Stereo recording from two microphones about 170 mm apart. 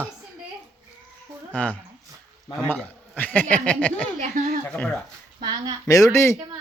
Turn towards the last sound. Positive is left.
turn(degrees=15)  # may be behind; listen again after turning